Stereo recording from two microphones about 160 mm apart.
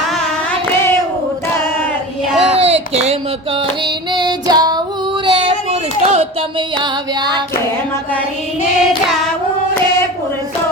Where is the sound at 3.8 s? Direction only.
25° right (ahead or behind).